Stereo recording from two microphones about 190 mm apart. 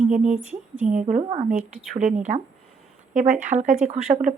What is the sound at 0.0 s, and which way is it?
A woman's voice, 40° right (ahead or behind).